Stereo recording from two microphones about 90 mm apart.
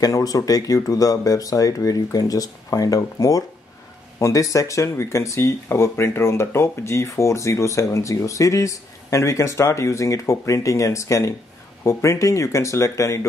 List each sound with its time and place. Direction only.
0.0 s speech: 40° left (ahead or behind)